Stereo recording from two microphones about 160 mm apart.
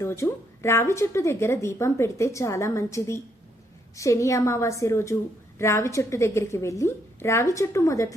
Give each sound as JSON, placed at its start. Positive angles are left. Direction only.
{"t": 0.0, "sound": "a woman's voice", "side_deg": 15}